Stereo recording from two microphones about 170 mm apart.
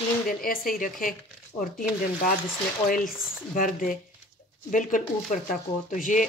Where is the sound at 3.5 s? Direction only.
55° left (ahead or behind).